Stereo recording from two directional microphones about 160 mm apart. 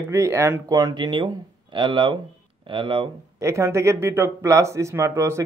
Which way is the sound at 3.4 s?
20° right (ahead or behind).